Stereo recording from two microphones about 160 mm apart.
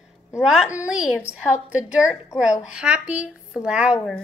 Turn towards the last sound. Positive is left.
turn(degrees=-5)  # may be behind; listen again after turning